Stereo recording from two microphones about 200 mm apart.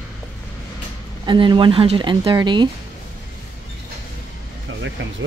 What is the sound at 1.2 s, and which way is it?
Speech, 25° right (ahead or behind).